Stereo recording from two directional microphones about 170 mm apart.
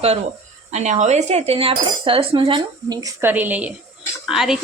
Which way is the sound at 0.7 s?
45° right (ahead or behind).